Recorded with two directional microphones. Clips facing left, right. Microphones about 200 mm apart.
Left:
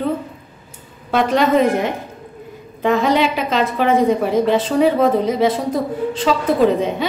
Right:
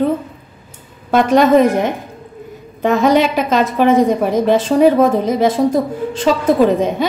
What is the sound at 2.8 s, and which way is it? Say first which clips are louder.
A woman's voice: right 3 dB; 45° right (ahead or behind).